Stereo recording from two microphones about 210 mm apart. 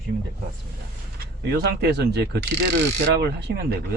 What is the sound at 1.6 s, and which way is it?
Speech, 50° right (ahead or behind).